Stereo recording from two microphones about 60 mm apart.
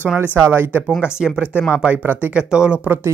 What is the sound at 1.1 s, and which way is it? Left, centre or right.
Speech, centre.